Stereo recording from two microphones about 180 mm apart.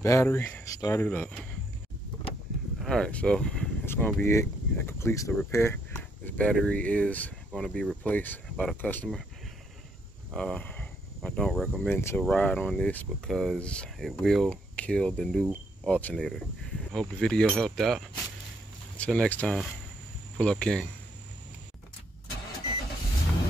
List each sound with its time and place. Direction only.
0.0 s speech: 15° left (ahead or behind)
2.8 s speech: 5° left (ahead or behind)
10.3 s speech: 5° left (ahead or behind)